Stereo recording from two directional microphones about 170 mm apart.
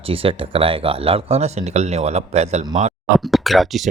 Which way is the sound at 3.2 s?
Centre (ahead or behind).